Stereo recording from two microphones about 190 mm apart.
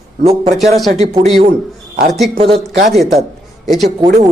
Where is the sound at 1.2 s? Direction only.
35° right (ahead or behind).